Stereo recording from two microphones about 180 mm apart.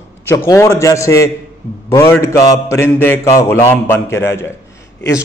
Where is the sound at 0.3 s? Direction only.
15° left (ahead or behind).